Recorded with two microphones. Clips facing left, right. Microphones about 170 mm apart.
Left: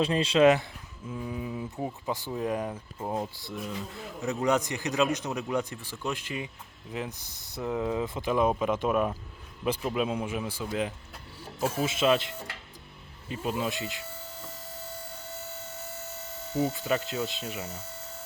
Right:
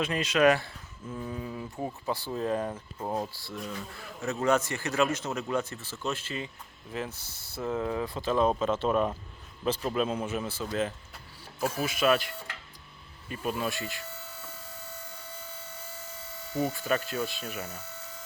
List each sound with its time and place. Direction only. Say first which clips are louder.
0.0 s speech: left 3 dB; 30° left (ahead or behind)
1.1 s a sound: left 2 dB; 10° left (ahead or behind)
1.8 s speech: right 1 dB; 15° left (ahead or behind)
3.0 s speech: even; centre (ahead or behind)
3.7 s speech: left 2 dB; 20° left (ahead or behind)
11.6 s speech: left 1 dB; 25° left (ahead or behind)
16.6 s speech: left 1 dB; 20° left (ahead or behind)